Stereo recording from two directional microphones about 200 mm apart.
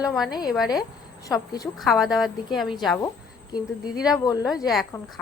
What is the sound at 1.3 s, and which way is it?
Speech, 20° left (ahead or behind).